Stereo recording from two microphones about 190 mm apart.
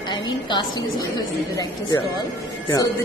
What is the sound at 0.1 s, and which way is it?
Speech, 25° left (ahead or behind).